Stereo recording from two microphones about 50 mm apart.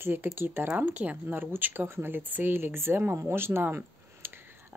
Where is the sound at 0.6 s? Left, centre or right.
Right.